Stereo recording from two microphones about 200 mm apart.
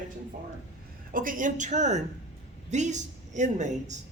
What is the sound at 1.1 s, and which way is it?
A man's voice, 45° right (ahead or behind).